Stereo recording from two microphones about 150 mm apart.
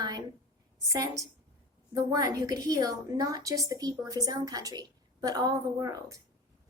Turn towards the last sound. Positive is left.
turn(degrees=-20)  # may be behind; listen again after turning